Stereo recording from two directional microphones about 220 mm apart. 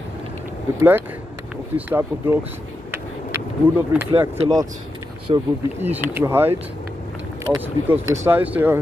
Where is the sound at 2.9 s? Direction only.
10° right (ahead or behind).